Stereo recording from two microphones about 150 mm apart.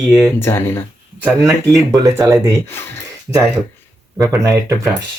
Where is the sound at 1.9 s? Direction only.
20° right (ahead or behind).